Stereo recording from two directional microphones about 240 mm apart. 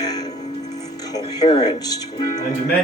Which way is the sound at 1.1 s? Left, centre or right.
Centre.